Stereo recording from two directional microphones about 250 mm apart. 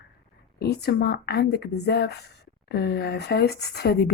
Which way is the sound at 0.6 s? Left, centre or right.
Left.